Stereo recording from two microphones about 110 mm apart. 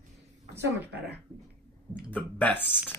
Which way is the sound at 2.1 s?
15° left (ahead or behind).